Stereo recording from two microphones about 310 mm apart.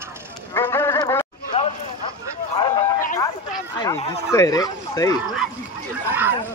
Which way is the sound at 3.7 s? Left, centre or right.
Centre.